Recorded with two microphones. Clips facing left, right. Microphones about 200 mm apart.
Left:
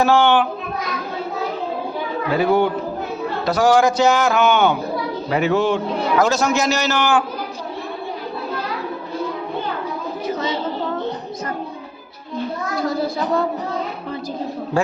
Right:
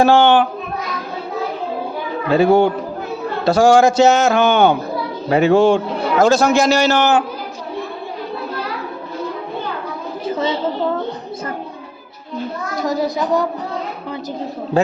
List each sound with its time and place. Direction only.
0.0 s a man's voice: 30° right (ahead or behind)
2.3 s a man's voice: 25° right (ahead or behind)
10.2 s a sound: 30° right (ahead or behind)